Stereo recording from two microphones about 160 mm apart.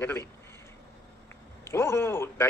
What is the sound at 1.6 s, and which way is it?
Speech, 15° left (ahead or behind).